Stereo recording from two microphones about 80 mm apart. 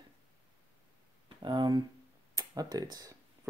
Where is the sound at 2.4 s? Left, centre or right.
Right.